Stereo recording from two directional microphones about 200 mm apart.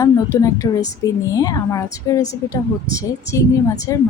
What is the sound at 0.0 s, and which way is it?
Speech, 15° left (ahead or behind).